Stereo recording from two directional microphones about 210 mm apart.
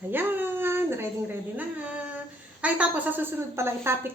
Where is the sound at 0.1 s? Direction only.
10° right (ahead or behind).